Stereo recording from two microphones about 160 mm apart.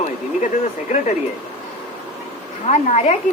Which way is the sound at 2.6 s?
45° left (ahead or behind).